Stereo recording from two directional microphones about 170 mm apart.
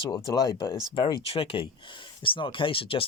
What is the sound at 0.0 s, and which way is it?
Speech, 25° left (ahead or behind).